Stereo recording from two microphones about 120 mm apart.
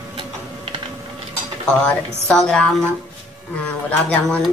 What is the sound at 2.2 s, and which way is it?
Speech, 5° left (ahead or behind).